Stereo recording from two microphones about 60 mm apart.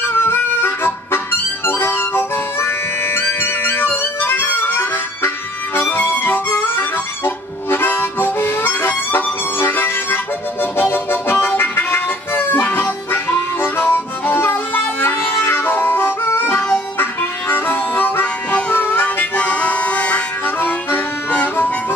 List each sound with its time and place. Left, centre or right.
0.0 s music: left
5.8 s harmonica: left
11.5 s music: left
17.0 s harmonica: left
18.7 s music: left
20.4 s harmonica: left